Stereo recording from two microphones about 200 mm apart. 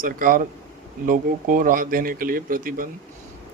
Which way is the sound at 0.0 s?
45° right (ahead or behind).